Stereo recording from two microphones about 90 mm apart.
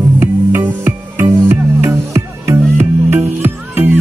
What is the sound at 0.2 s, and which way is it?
Music, 25° right (ahead or behind).